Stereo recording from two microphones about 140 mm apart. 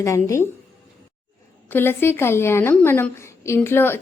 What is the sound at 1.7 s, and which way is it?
A woman's voice, 15° left (ahead or behind).